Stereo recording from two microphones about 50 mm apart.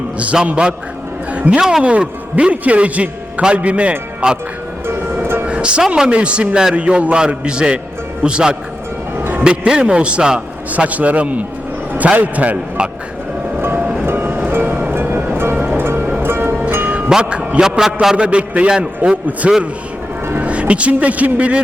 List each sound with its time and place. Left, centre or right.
0.4 s a man's voice: right
4.9 s music: right
5.5 s music: right
5.9 s a man's voice: right
10.7 s a man's voice: right
13.6 s music: right
15.5 s music: right
15.8 s music: right
17.1 s music: centre
17.6 s a man's voice: centre
18.3 s a man's voice: right